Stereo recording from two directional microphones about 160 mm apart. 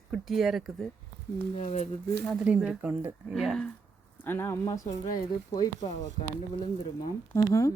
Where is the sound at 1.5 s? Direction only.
45° left (ahead or behind).